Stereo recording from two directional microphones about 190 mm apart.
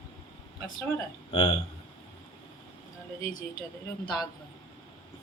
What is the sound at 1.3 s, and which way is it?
Speech, 30° left (ahead or behind).